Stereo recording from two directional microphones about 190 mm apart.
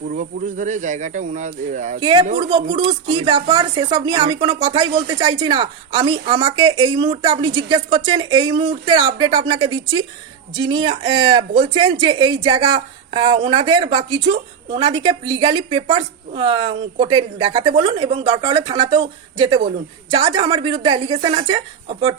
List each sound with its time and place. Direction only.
0.0 s speech: 45° right (ahead or behind)
2.0 s speech: 25° right (ahead or behind)